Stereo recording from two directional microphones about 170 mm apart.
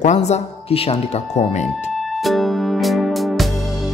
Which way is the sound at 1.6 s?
Centre (ahead or behind).